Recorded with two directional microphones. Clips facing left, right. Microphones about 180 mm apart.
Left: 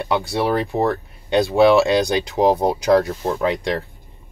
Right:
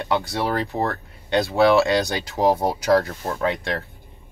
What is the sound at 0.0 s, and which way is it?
Speech, 15° left (ahead or behind).